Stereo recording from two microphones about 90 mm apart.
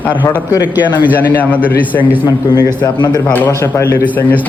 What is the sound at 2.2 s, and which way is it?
A man's voice, 50° left (ahead or behind).